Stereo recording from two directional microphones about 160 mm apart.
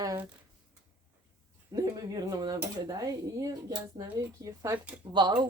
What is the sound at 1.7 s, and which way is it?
Speech, 25° right (ahead or behind).